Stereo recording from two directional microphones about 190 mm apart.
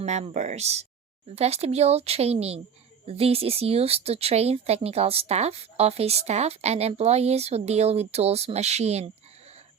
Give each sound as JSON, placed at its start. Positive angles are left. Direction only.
{"t": 0.0, "sound": "speech", "side_deg": -35}